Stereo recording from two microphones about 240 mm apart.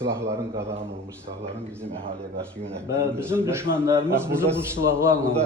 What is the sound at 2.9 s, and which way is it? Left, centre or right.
Speech, centre.